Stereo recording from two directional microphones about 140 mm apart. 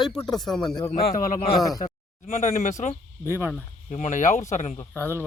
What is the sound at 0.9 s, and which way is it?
Speech, 85° left.